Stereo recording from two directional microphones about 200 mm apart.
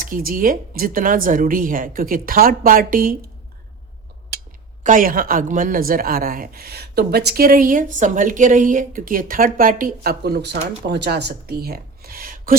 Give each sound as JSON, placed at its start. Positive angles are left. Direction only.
{"t": 0.0, "sound": "a woman's voice", "side_deg": -45}
{"t": 4.8, "sound": "a woman's voice", "side_deg": -40}